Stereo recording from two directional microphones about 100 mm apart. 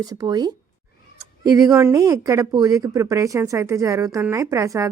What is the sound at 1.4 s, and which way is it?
A woman's voice, 35° right (ahead or behind).